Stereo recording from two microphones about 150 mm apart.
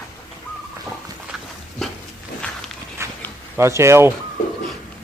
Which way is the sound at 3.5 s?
20° right (ahead or behind).